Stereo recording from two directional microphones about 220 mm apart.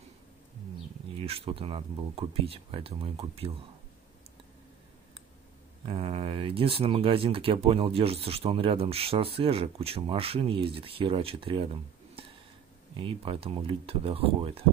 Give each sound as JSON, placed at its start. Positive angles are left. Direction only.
{"t": 1.1, "sound": "speech", "side_deg": -25}
{"t": 5.9, "sound": "speech", "side_deg": -25}